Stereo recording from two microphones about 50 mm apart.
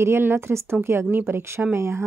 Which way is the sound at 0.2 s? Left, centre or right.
Right.